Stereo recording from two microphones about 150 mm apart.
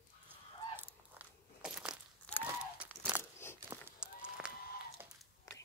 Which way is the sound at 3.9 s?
5° right (ahead or behind).